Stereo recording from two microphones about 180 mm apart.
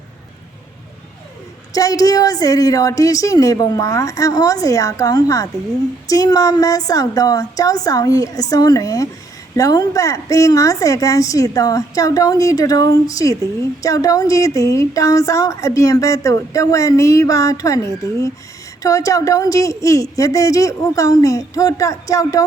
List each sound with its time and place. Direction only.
1.7 s a woman's voice: 20° left (ahead or behind)